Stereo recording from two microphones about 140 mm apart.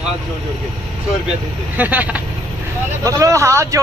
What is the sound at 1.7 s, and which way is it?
Speech, 10° right (ahead or behind).